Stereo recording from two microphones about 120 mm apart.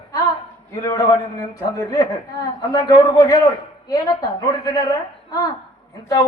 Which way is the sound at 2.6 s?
30° left (ahead or behind).